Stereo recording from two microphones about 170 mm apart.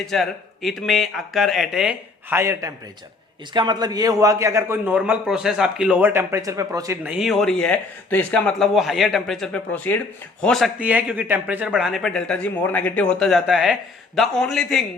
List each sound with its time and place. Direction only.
0.0 s a man's voice: centre (ahead or behind)